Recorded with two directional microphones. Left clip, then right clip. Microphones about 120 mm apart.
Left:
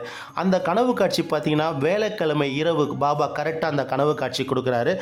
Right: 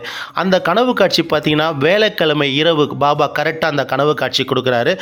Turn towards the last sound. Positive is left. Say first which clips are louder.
# right 7 dB
turn(degrees=-20)  # may be behind; listen again after turning